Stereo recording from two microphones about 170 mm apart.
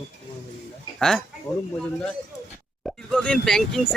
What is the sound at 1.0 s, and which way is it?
Speech, 5° left (ahead or behind).